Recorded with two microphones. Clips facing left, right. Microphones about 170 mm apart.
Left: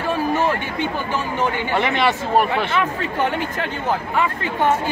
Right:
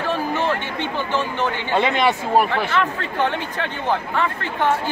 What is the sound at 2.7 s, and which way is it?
Speech, 10° left (ahead or behind).